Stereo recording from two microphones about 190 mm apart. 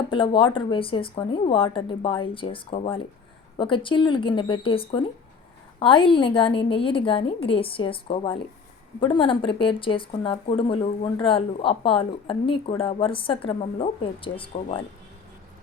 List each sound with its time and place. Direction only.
0.1 s speech: 25° left (ahead or behind)